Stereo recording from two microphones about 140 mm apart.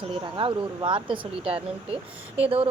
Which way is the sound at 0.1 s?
35° right (ahead or behind).